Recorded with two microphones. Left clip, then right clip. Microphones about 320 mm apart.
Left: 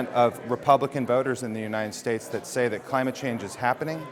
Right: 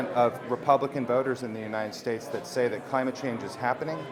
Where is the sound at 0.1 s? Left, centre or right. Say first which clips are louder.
Left 3 dB; left.